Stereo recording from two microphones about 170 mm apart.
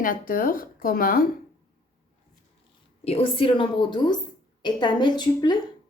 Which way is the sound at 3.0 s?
35° left (ahead or behind).